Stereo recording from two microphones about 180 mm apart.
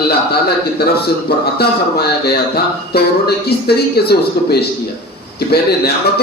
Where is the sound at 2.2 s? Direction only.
60° left (ahead or behind).